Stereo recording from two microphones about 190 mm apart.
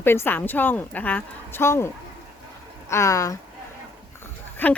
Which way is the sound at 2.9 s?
15° left (ahead or behind).